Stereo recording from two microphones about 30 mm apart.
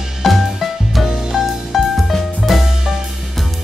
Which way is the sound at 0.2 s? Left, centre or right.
Centre.